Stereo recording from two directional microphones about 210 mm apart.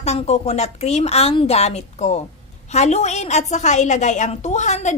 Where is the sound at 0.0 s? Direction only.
30° left (ahead or behind).